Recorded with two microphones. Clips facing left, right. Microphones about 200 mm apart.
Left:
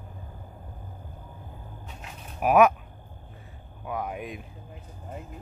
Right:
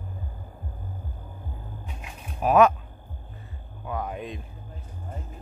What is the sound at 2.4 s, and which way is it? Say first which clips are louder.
Speech: right 1 dB; 10° left (ahead or behind).